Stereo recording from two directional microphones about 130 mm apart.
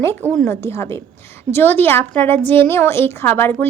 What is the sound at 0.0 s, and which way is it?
A woman's voice, 15° left (ahead or behind).